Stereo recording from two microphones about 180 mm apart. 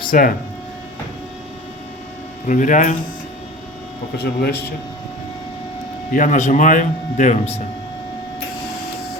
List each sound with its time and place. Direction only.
0.1 s speech: 50° left (ahead or behind)
2.5 s speech: 45° left (ahead or behind)
4.2 s speech: 65° left (ahead or behind)
6.1 s speech: 45° left (ahead or behind)